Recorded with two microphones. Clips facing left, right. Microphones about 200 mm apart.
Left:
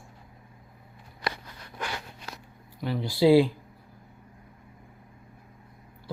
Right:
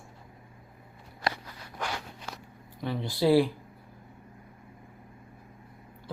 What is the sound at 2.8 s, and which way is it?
Speech, 10° left (ahead or behind).